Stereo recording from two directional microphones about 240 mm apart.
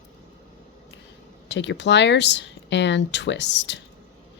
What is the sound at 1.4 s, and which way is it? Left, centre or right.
Speech, left.